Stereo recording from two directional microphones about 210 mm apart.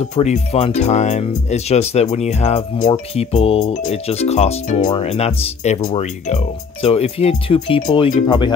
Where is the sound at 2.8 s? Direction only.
20° left (ahead or behind).